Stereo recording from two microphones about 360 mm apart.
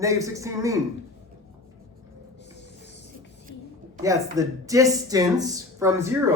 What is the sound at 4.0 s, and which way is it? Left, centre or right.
A man's voice, centre.